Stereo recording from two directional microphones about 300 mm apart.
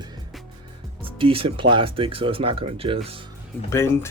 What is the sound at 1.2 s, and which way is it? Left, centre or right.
Speech, centre.